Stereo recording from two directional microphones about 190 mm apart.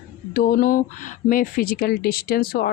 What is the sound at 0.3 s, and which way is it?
Speech, 45° left (ahead or behind).